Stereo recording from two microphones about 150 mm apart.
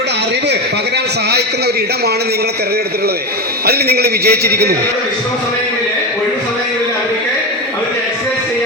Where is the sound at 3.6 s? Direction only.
90° right.